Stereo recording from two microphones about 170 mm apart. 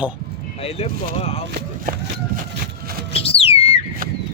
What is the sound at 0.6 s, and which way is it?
Speech, 35° left (ahead or behind).